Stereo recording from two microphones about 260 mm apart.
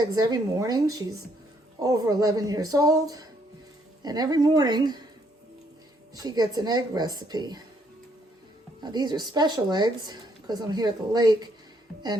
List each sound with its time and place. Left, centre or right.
0.0 s a woman's voice: centre
6.1 s a woman's voice: centre
8.8 s a woman's voice: centre